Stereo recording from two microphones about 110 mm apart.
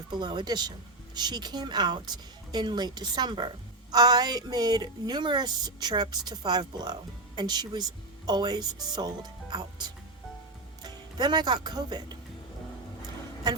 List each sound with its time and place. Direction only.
0.1 s a woman's voice: 45° right (ahead or behind)